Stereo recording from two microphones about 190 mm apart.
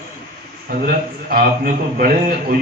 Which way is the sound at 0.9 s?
50° right (ahead or behind).